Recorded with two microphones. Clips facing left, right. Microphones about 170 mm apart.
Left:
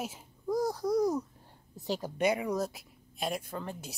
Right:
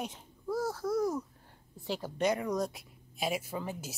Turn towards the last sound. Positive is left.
turn(degrees=-5)  # may be behind; listen again after turning